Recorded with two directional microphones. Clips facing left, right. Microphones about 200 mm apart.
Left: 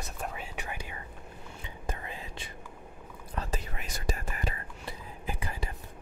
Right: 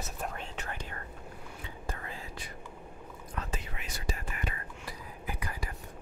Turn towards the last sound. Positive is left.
turn(degrees=25)  # may be behind; listen again after turning